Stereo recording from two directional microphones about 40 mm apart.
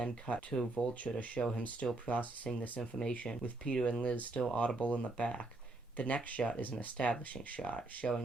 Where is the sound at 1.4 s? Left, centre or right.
Centre.